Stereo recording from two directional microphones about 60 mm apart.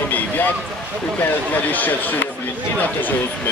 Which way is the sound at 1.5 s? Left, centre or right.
Left.